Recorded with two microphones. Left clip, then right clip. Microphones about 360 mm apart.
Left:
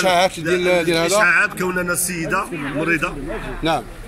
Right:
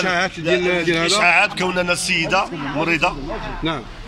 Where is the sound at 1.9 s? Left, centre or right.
Centre.